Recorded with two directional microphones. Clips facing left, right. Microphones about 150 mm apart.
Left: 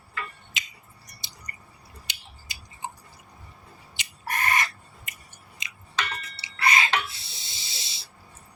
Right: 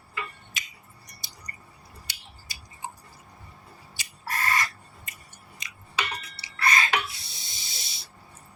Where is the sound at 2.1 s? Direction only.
20° left (ahead or behind).